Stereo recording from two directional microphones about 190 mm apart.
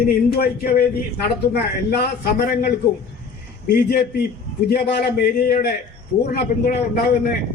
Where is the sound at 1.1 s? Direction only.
55° left (ahead or behind).